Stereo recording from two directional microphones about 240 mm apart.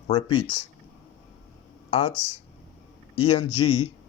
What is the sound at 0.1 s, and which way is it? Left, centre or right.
Speech, left.